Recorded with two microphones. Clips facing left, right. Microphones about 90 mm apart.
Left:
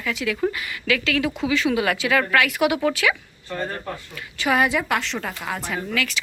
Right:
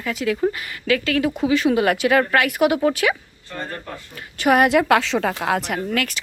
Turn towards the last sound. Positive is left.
turn(degrees=-45)  # may be behind; listen again after turning